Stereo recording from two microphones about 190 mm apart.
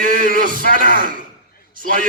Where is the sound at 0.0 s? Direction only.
45° right (ahead or behind).